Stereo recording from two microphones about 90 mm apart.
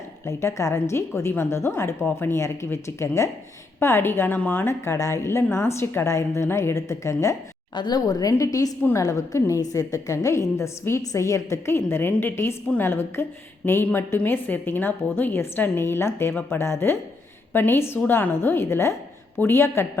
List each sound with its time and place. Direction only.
0.3 s a woman's voice: 35° left (ahead or behind); by 4.7 s 15° left (ahead or behind)
4.7 s a woman's voice: 35° left (ahead or behind)
7.8 s a woman's voice: 50° left (ahead or behind); by 19.9 s 30° left (ahead or behind)